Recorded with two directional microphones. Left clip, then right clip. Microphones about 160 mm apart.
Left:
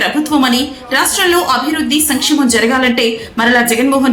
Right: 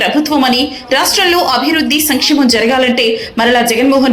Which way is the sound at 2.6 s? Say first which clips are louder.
Right 1 dB; 15° right (ahead or behind).